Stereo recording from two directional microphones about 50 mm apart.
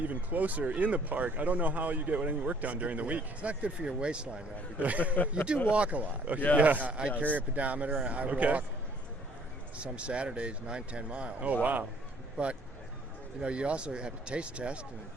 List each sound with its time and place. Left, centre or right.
0.0 s speech: right
9.7 s speech: right
13.4 s speech: right